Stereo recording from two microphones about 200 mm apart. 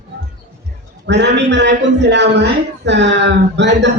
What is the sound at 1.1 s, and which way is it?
Speech, 60° right (ahead or behind).